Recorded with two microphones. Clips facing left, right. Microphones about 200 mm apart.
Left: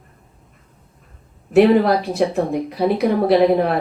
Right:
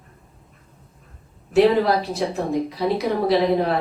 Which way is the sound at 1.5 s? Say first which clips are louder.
Left 3 dB; 60° left (ahead or behind).